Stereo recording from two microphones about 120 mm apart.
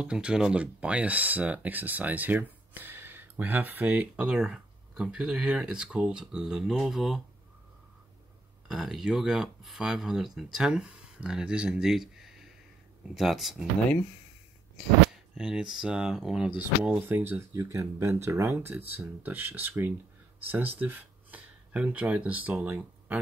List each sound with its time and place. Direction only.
0.0 s speech: 10° right (ahead or behind)
8.6 s speech: 5° right (ahead or behind)
15.3 s speech: 5° right (ahead or behind)